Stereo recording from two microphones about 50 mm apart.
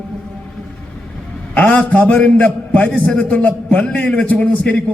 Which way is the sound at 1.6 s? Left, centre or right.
Left.